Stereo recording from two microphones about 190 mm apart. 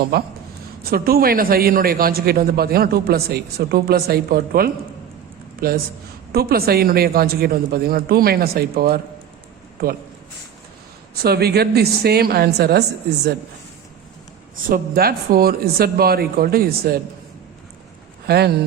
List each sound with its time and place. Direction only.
0.0 s a woman's voice: 55° right (ahead or behind)
11.1 s a woman's voice: 55° right (ahead or behind)
14.7 s a man's voice: 55° right (ahead or behind)
18.3 s a woman's voice: 60° right (ahead or behind)